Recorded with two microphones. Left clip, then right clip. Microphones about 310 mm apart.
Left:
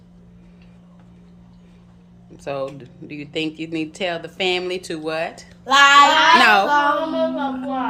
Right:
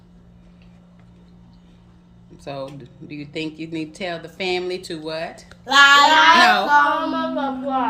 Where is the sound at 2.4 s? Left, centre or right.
Centre.